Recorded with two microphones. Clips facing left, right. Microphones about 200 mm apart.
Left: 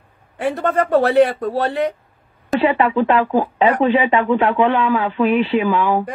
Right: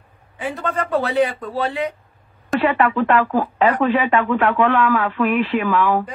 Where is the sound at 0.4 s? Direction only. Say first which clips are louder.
Left 6 dB; 75° left (ahead or behind).